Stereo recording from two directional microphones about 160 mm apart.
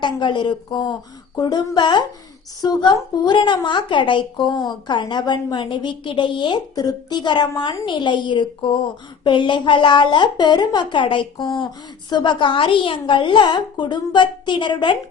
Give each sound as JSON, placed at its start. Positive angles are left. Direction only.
{"t": 0.0, "sound": "a woman's voice", "side_deg": 30}